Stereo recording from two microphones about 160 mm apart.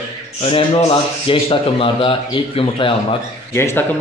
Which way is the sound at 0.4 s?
35° left (ahead or behind).